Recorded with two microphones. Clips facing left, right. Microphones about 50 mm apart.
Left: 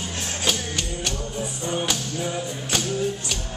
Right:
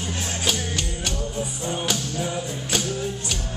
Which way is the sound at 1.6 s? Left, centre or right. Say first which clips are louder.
Left 1 dB; centre.